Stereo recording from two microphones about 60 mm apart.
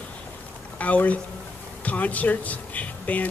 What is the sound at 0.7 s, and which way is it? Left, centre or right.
Speech, left.